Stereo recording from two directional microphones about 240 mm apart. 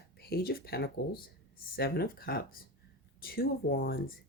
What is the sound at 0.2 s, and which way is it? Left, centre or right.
Speech, left.